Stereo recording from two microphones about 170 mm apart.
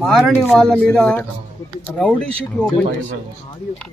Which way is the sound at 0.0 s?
Centre (ahead or behind).